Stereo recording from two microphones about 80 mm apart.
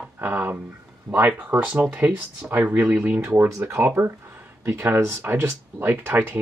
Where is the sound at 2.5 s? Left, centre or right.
Right.